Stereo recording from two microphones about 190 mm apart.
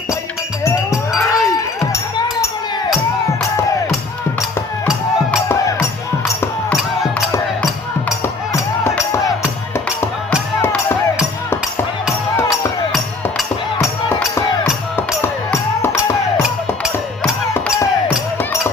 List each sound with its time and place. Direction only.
0.6 s a sound: 15° left (ahead or behind)
6.2 s music: 15° left (ahead or behind)
10.6 s music: 10° left (ahead or behind)
12.5 s music: centre (ahead or behind)
14.3 s music: 10° left (ahead or behind)